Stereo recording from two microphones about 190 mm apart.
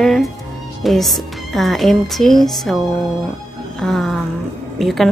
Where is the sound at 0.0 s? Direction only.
Centre (ahead or behind).